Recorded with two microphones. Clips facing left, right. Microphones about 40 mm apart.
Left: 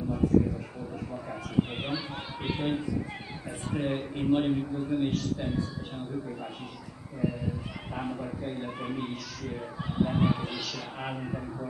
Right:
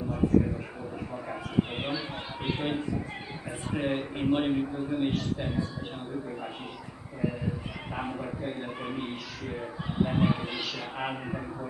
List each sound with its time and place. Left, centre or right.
1.1 s speech: centre
2.5 s a man's voice: centre
7.9 s speech: centre